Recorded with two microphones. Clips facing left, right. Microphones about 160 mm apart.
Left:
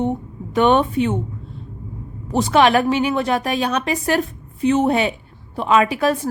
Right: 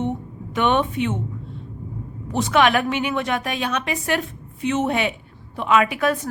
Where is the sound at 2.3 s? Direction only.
35° left (ahead or behind).